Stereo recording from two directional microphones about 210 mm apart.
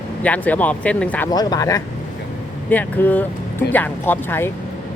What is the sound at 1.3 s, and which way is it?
Speech, 20° left (ahead or behind).